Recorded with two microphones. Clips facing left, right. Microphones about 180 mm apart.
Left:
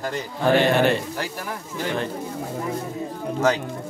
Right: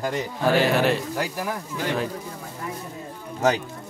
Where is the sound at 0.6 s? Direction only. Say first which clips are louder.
Left 2 dB; 5° right (ahead or behind).